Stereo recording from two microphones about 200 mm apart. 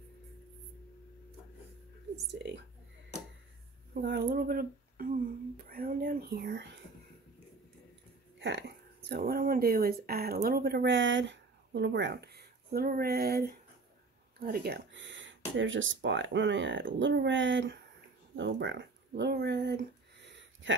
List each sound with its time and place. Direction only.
2.3 s speech: 60° right (ahead or behind)
3.9 s speech: 55° right (ahead or behind)
8.4 s speech: 65° right (ahead or behind)
18.3 s a sound: 65° right (ahead or behind)